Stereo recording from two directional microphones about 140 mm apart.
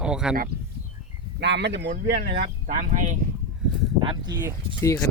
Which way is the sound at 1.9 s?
90° right.